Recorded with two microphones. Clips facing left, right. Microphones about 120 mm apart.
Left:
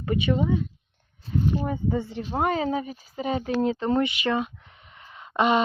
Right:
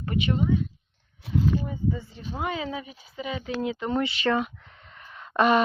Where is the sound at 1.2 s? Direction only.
75° right (ahead or behind).